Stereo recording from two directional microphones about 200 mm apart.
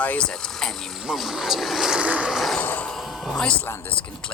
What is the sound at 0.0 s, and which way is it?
Speech, 5° left (ahead or behind).